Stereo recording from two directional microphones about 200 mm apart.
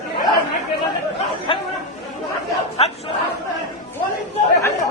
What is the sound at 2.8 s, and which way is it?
Chatter, 30° left (ahead or behind).